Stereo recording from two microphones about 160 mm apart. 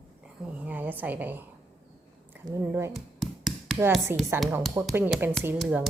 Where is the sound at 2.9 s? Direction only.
Centre (ahead or behind).